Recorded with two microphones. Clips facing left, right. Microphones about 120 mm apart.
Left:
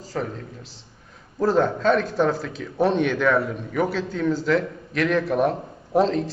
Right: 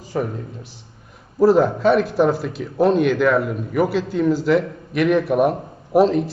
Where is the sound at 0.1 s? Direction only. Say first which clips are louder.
Right 5 dB; 15° right (ahead or behind).